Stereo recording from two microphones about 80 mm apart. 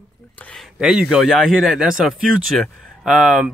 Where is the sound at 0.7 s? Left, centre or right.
Centre.